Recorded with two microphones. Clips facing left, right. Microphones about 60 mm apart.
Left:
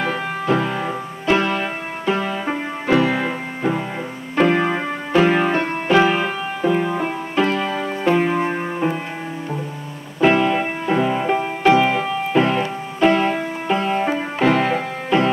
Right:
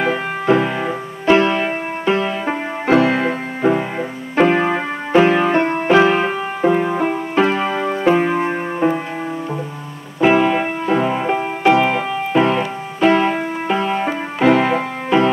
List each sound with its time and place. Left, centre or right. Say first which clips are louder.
0.0 s music: right 4 dB; centre
1.2 s music: right 5 dB; right
4.6 s keyboard: right 2 dB; centre
5.4 s music: right 4 dB; right
6.8 s music: right 3 dB; centre
10.2 s keyboard: right 2 dB; centre
10.9 s music: right 1 dB; centre